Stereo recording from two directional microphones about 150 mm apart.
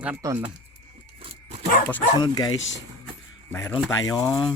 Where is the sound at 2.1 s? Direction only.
25° left (ahead or behind).